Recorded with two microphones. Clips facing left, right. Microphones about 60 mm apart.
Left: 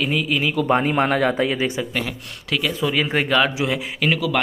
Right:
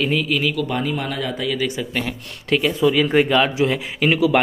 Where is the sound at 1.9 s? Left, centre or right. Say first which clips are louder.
Right 1 dB; centre.